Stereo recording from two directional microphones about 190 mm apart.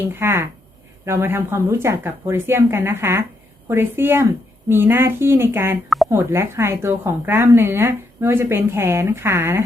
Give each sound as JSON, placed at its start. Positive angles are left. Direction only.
{"t": 0.0, "sound": "a woman's voice", "side_deg": -10}